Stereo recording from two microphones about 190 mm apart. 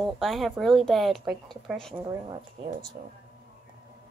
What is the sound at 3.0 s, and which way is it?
Speech, 35° right (ahead or behind).